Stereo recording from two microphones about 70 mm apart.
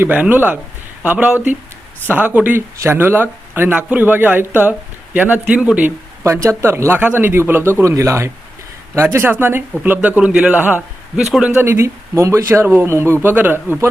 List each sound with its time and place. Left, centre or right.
0.1 s a man's voice: right
2.6 s speech: right
3.8 s a man's voice: centre
6.2 s speech: right
7.0 s a man's voice: right